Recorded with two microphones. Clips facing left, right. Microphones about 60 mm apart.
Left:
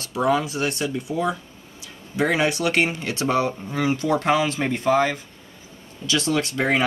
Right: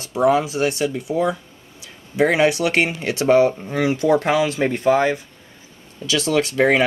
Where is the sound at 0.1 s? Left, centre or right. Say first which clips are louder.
Right 4 dB; right.